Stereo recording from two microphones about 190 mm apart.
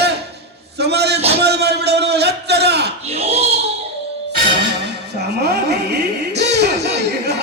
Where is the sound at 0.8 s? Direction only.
60° right (ahead or behind).